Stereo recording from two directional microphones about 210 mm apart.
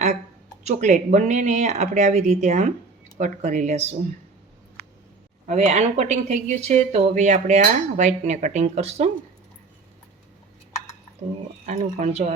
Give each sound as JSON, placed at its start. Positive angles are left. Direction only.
{"t": 0.6, "sound": "speech", "side_deg": -35}
{"t": 5.5, "sound": "speech", "side_deg": -35}
{"t": 11.6, "sound": "speech", "side_deg": -35}